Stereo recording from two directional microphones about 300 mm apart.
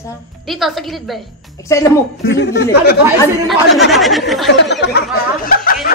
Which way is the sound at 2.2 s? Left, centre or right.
Left.